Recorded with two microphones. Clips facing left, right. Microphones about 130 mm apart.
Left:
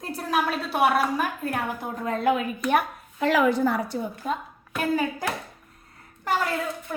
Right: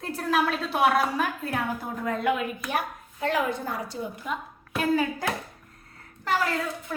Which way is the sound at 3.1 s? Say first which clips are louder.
Left 6 dB; 90° left.